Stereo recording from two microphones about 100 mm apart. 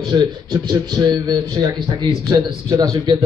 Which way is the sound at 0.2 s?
40° right (ahead or behind).